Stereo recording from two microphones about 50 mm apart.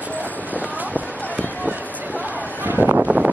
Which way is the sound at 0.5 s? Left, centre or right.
Right.